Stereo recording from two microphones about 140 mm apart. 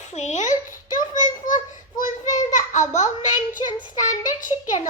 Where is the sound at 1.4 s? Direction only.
70° left (ahead or behind).